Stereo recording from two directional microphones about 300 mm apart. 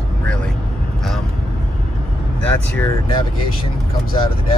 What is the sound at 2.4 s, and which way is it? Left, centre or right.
Speech, centre.